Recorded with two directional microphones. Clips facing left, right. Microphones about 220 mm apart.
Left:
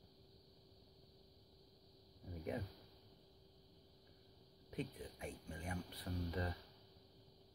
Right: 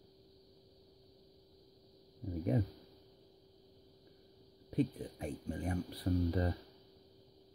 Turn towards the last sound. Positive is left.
turn(degrees=-35)  # may be behind; listen again after turning